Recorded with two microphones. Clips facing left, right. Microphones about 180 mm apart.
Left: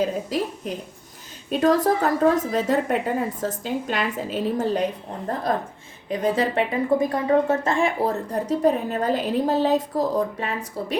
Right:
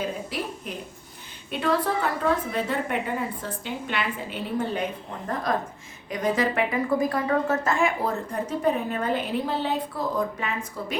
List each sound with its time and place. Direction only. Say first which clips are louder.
1.5 s a woman's voice: left 6 dB; 40° left (ahead or behind)